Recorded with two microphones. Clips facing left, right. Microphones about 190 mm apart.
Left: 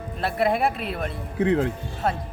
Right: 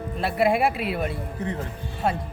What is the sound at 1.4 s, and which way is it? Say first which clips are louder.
Speech: left 11 dB; 80° left.